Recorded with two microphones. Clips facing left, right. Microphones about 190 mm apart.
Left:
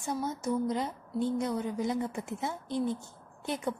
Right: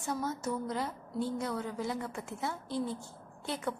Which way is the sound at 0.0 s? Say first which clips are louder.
Left 2 dB; 15° left (ahead or behind).